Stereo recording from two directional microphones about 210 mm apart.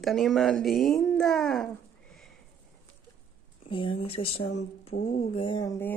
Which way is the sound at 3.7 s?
25° left (ahead or behind).